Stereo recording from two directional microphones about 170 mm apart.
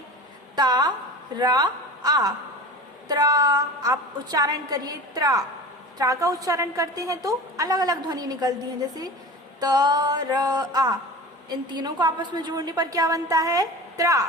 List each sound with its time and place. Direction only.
0.5 s a woman's voice: 25° right (ahead or behind)
9.6 s a woman's voice: 20° right (ahead or behind)